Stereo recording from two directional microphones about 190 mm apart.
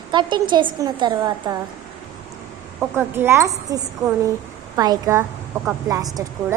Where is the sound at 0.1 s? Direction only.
25° right (ahead or behind).